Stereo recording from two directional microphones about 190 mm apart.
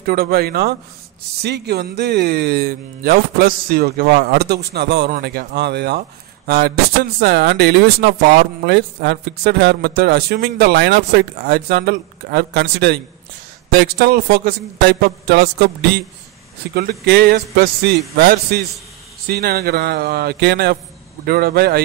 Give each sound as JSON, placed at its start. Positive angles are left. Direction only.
{"t": 0.0, "sound": "speech", "side_deg": -55}